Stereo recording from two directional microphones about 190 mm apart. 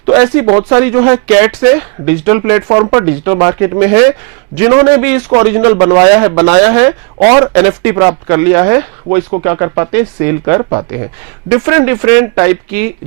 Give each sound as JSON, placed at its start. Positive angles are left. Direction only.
{"t": 0.0, "sound": "speech", "side_deg": -15}
{"t": 5.7, "sound": "speech", "side_deg": -30}
{"t": 6.0, "sound": "speech", "side_deg": -15}